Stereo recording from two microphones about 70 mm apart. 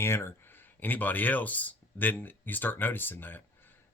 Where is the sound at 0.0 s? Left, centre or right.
Left.